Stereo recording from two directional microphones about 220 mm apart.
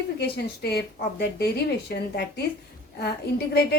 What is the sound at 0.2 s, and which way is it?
A woman's voice, 45° left (ahead or behind).